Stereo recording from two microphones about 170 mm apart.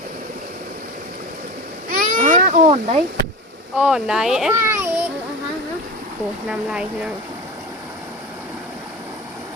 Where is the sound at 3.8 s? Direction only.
5° right (ahead or behind).